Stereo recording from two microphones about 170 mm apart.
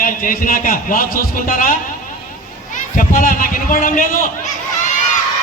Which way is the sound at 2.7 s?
50° left (ahead or behind).